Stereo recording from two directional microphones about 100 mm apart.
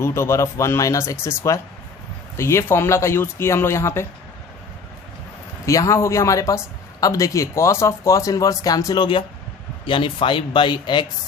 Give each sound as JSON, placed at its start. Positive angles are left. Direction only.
{"t": 0.0, "sound": "speech", "side_deg": 25}
{"t": 5.6, "sound": "speech", "side_deg": 35}
{"t": 9.8, "sound": "speech", "side_deg": 55}